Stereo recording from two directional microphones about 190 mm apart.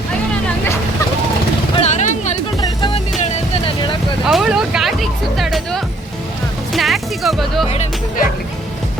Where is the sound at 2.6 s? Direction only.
25° left (ahead or behind).